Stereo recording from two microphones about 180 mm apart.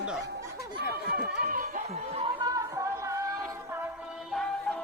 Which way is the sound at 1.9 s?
35° right (ahead or behind).